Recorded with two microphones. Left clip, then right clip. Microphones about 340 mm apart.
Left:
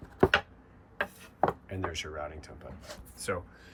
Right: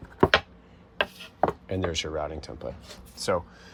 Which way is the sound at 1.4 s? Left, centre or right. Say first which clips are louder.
Right 4 dB; centre.